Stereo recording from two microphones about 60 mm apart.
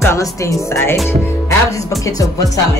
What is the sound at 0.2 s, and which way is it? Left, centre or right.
Speech, left.